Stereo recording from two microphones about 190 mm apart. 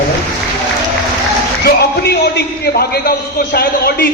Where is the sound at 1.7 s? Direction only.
55° left (ahead or behind).